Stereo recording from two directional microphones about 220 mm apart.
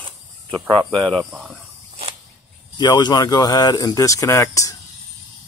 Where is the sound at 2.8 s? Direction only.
20° left (ahead or behind).